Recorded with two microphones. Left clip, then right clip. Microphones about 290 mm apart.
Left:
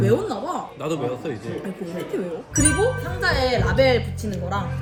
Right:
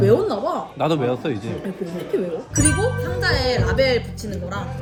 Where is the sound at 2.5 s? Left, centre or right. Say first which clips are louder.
Left 2 dB; centre.